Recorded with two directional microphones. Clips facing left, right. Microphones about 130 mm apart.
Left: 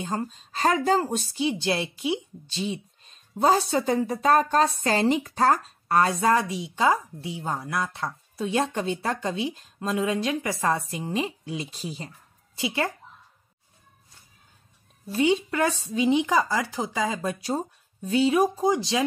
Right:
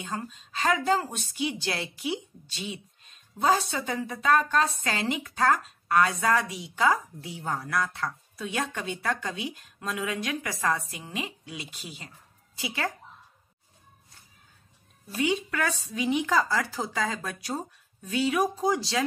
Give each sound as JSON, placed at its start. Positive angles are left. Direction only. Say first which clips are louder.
{"t": 0.1, "sound": "a woman's voice", "louder": "left 5 dB", "side_deg": 35}
{"t": 12.5, "sound": "speech", "louder": "left 5 dB", "side_deg": 25}
{"t": 15.0, "sound": "speech", "louder": "left 5 dB", "side_deg": 30}